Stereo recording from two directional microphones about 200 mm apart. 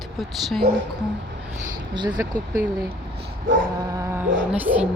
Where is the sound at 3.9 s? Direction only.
15° right (ahead or behind).